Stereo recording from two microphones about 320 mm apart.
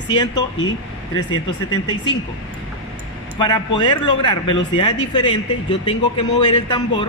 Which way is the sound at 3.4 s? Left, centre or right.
Centre.